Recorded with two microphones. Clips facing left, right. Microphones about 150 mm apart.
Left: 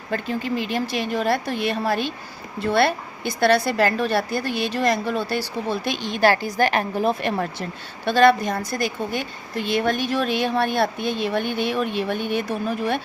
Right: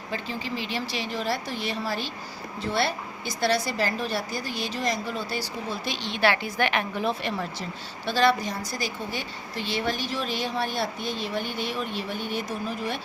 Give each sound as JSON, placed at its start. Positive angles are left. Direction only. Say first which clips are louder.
{"t": 0.1, "sound": "a woman's voice", "louder": "left 7 dB", "side_deg": 50}